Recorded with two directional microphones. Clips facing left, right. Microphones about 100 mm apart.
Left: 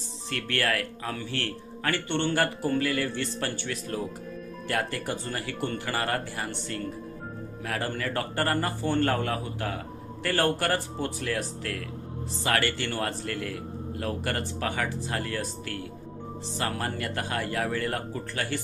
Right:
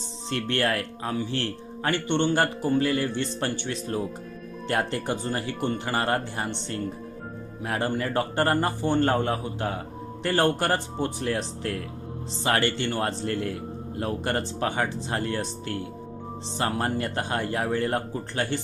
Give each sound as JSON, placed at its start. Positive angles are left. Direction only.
{"t": 0.3, "sound": "speech", "side_deg": -25}